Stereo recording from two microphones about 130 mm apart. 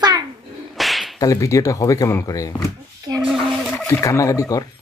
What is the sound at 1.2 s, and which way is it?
Speech, 25° left (ahead or behind).